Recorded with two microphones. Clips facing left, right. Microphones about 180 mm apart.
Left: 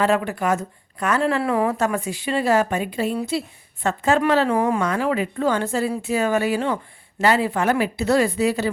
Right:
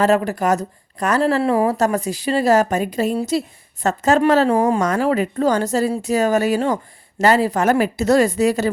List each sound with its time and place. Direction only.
0.0 s speech: 40° right (ahead or behind)